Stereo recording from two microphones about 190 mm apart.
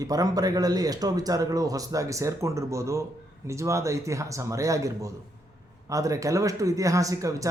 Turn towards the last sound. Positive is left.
turn(degrees=-15)  # may be behind; listen again after turning